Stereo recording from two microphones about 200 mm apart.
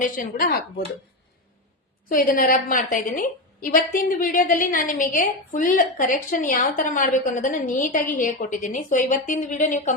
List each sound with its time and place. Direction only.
0.0 s speech: 45° left (ahead or behind)
2.0 s a woman's voice: 45° left (ahead or behind)